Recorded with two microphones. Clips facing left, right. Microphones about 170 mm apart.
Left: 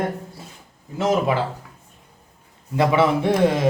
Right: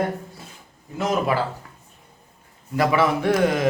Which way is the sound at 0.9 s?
25° left (ahead or behind).